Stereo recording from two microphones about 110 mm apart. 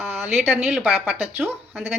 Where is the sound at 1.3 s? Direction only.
20° right (ahead or behind).